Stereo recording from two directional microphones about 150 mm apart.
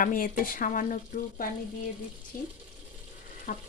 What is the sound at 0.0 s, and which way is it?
Speech, 65° left (ahead or behind).